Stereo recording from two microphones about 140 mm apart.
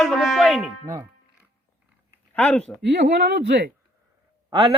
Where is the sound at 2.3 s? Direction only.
10° left (ahead or behind).